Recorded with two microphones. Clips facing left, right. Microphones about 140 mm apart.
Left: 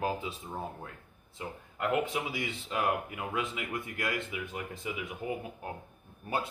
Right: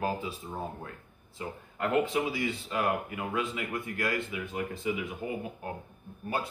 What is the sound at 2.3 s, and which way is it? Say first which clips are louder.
Speech: right 3 dB; 20° left (ahead or behind).